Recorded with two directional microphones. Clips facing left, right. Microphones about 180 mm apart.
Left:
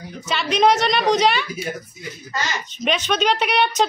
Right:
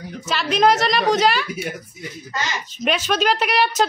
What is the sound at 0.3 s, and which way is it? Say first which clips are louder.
A woman's voice: even; centre (ahead or behind).